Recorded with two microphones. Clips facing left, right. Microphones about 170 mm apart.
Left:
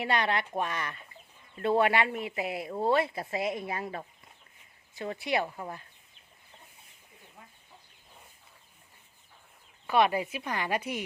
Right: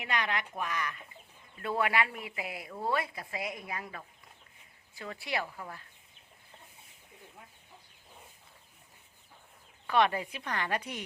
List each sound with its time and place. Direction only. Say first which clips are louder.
0.0 s speech: left 5 dB; 35° left (ahead or behind)
9.8 s speech: left 2 dB; 10° left (ahead or behind)